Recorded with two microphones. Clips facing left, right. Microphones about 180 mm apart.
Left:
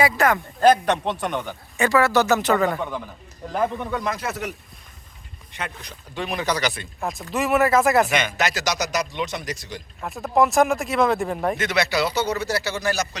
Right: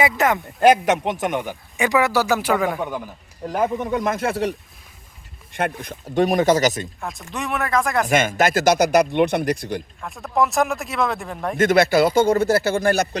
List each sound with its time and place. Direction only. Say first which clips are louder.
0.0 s speech: even; 20° right (ahead or behind)
3.9 s speech: right 5 dB; 50° right (ahead or behind)
4.3 s speech: right 7 dB; 30° right (ahead or behind)
5.5 s speech: right 9 dB; 50° right (ahead or behind)
7.0 s speech: left 7 dB; centre (ahead or behind)
8.0 s speech: right 5 dB; 45° right (ahead or behind)
10.0 s speech: left 3 dB; 5° left (ahead or behind)
11.5 s speech: right 7 dB; 50° right (ahead or behind)